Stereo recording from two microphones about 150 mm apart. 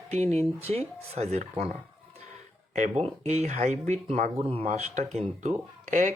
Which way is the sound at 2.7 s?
50° right (ahead or behind).